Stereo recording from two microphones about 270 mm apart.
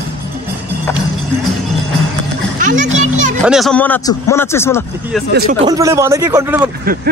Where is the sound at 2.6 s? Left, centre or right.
Right.